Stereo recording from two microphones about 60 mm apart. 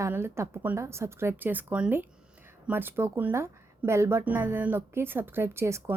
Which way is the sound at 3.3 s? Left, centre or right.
Right.